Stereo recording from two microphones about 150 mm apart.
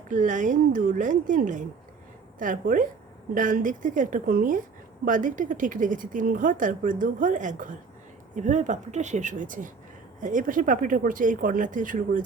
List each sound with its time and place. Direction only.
0.1 s speech: 60° right (ahead or behind)